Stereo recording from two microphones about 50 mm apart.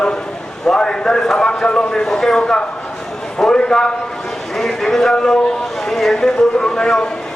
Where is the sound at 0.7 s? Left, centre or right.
Centre.